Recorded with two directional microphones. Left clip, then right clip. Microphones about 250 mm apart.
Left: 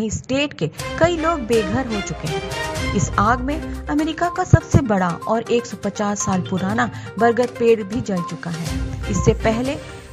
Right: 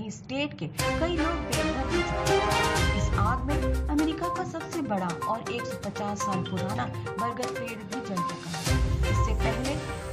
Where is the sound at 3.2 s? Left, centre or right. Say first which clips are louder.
Left 12 dB; left.